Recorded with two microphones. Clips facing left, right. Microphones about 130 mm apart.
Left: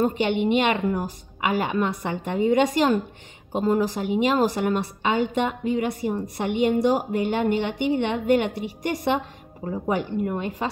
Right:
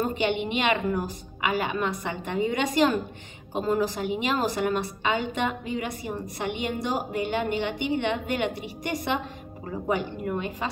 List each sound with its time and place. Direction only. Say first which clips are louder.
0.0 s a woman's voice: left 4 dB; 50° left (ahead or behind)